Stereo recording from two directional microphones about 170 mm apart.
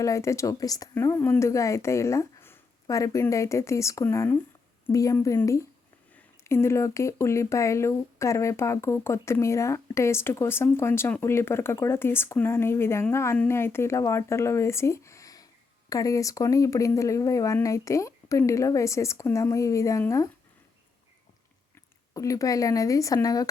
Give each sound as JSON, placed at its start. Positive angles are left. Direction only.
{"t": 0.0, "sound": "speech", "side_deg": 15}
{"t": 22.1, "sound": "speech", "side_deg": 20}